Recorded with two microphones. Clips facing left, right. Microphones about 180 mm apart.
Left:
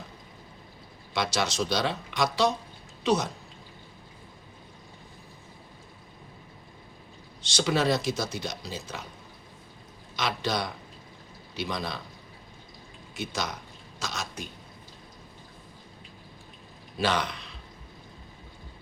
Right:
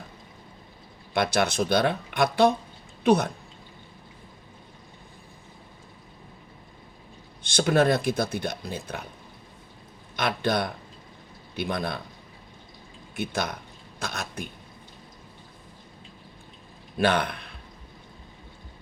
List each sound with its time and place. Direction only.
1.1 s speech: 55° right (ahead or behind)
7.4 s speech: 55° right (ahead or behind)
10.2 s speech: 55° right (ahead or behind)
13.1 s a man's voice: 55° right (ahead or behind)
17.0 s a man's voice: 55° right (ahead or behind)